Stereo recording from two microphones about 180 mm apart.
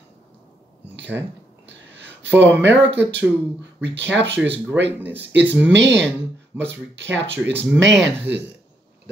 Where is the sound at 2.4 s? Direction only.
80° right.